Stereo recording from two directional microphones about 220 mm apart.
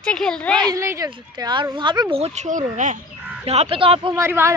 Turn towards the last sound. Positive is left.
turn(degrees=-10)  # may be behind; listen again after turning